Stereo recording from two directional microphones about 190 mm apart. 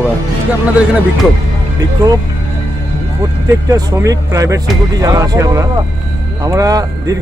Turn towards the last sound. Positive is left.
turn(degrees=-20)  # may be behind; listen again after turning